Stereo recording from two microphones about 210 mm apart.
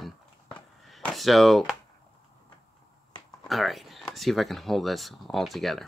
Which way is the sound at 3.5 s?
Centre (ahead or behind).